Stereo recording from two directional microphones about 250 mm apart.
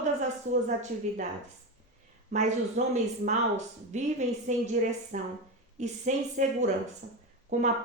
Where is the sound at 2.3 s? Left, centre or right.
Right.